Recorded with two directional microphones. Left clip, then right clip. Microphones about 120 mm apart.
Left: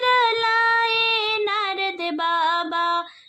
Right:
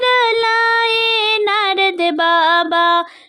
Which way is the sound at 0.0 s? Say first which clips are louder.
Right 5 dB; 55° right (ahead or behind).